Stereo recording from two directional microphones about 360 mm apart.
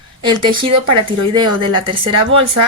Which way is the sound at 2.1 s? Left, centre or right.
Right.